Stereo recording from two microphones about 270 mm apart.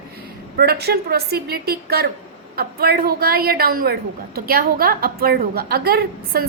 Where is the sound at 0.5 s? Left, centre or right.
Right.